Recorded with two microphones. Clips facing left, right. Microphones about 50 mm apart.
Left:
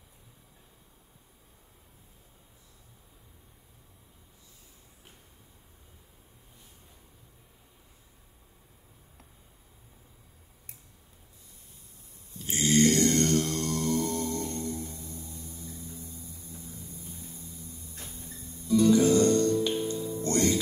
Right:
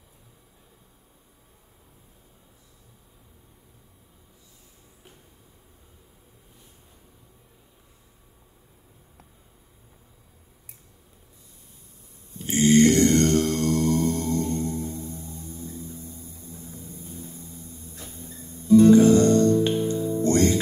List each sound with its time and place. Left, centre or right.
12.4 s mantra: right
17.2 s music: right